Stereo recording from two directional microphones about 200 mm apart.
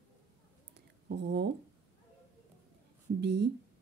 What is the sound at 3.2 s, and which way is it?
Speech, 55° right (ahead or behind).